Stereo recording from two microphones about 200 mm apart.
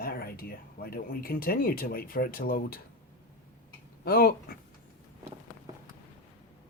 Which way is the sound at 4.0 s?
50° left (ahead or behind).